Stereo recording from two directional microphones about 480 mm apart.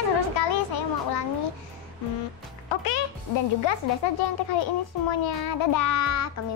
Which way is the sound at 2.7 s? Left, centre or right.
Left.